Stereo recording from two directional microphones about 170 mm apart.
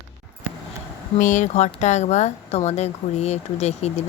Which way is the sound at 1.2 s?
45° left (ahead or behind).